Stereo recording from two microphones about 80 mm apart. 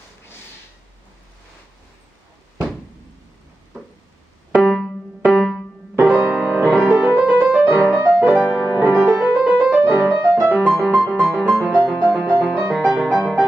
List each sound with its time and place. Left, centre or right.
4.6 s music: centre
6.0 s music: centre
6.7 s music: centre
7.0 s music: centre
10.6 s music: centre
11.7 s music: centre